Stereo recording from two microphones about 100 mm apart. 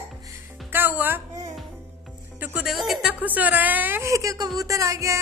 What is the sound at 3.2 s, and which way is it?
A woman's voice, 15° right (ahead or behind).